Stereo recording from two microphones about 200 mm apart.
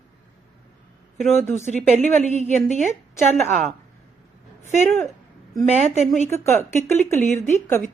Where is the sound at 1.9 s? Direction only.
35° right (ahead or behind).